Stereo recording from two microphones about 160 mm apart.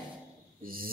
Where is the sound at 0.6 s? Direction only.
65° right (ahead or behind).